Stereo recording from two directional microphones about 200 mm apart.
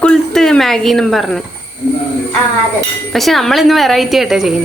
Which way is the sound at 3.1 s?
Centre (ahead or behind).